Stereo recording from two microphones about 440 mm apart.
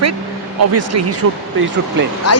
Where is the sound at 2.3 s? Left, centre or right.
Left.